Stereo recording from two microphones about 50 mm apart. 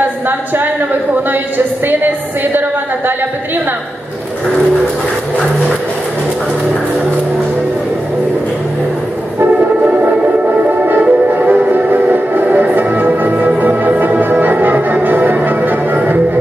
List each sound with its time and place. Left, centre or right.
9.4 s music: right